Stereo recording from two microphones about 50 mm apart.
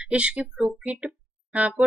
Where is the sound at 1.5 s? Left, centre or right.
Right.